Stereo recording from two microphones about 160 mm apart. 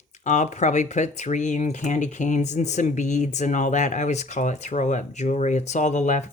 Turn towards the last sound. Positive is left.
turn(degrees=50)  # may be behind; listen again after turning